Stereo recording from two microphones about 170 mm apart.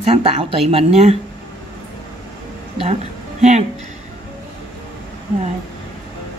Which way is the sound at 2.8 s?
40° right (ahead or behind).